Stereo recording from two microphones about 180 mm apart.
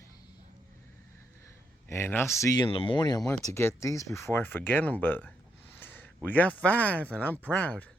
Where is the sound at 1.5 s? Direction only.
15° left (ahead or behind).